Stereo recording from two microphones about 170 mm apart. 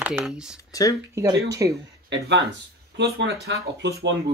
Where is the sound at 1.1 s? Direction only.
20° right (ahead or behind).